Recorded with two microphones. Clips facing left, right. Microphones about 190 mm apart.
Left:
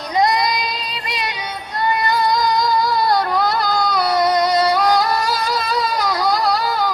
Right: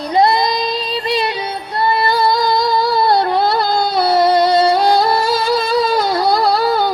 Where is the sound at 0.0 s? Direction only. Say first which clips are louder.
Right 4 dB; 30° right (ahead or behind).